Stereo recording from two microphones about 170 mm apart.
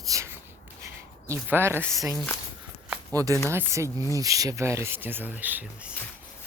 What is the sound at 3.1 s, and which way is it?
Speech, 20° right (ahead or behind).